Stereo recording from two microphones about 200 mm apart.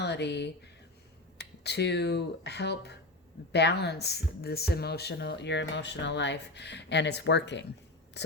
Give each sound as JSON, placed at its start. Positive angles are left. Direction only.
{"t": 0.0, "sound": "speech", "side_deg": 60}
{"t": 1.6, "sound": "speech", "side_deg": 55}